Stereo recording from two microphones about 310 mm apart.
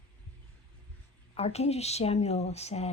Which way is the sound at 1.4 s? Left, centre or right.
Centre.